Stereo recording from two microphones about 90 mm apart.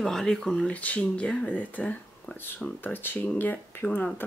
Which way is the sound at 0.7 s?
15° left (ahead or behind).